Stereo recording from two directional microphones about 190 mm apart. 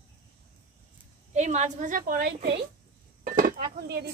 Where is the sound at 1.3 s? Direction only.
40° right (ahead or behind).